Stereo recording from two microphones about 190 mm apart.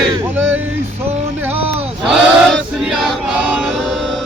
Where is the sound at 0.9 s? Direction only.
35° right (ahead or behind).